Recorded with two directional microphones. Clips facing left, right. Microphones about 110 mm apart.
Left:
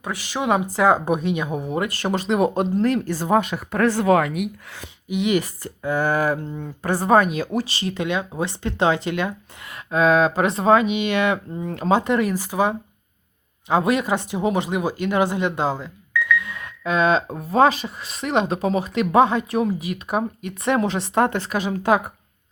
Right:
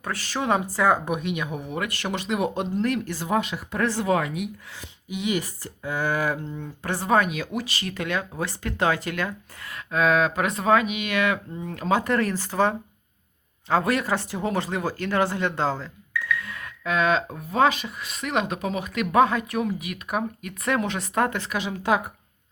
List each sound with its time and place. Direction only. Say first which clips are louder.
0.0 s speech: left 3 dB; 15° left (ahead or behind)
1.0 s speech: left 5 dB; 35° left (ahead or behind)
11.5 s speech: left 5 dB; 45° left (ahead or behind)
11.8 s speech: left 4 dB; 30° left (ahead or behind)
12.1 s speech: left 3 dB; 10° left (ahead or behind); by 22.0 s 45° left (ahead or behind)